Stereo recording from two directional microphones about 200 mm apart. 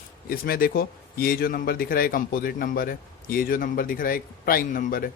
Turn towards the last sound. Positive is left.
turn(degrees=45)  # may be behind; listen again after turning